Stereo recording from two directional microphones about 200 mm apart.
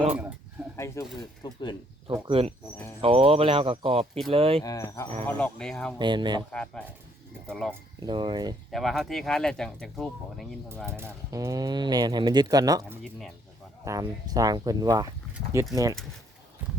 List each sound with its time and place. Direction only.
1.0 s speech: 15° left (ahead or behind)
2.2 s speech: 30° right (ahead or behind)
4.6 s speech: 15° left (ahead or behind)
5.2 s speech: 5° left (ahead or behind)
6.0 s speech: 25° right (ahead or behind)
6.5 s speech: 5° left (ahead or behind)
8.0 s speech: 25° right (ahead or behind)
8.7 s speech: centre (ahead or behind)
10.8 s speech: 10° right (ahead or behind)
13.0 s speech: centre (ahead or behind)
13.8 s speech: 15° right (ahead or behind)